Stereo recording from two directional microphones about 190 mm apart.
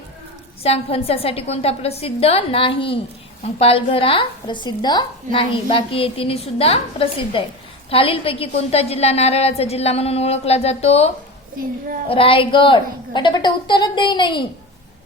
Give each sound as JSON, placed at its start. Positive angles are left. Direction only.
{"t": 0.6, "sound": "a woman's voice", "side_deg": 30}